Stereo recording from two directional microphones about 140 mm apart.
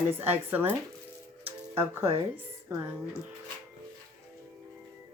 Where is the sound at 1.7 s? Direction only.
15° right (ahead or behind).